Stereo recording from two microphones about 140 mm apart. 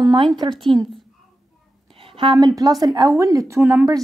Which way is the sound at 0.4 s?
35° right (ahead or behind).